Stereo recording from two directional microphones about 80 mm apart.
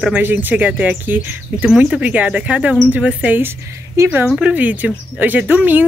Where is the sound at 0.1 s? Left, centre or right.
Right.